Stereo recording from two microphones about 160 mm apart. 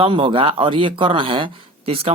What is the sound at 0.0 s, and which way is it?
Speech, 35° right (ahead or behind).